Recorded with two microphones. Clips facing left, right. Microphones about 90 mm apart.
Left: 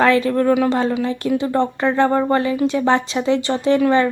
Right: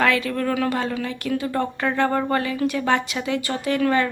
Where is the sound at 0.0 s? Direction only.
30° left (ahead or behind).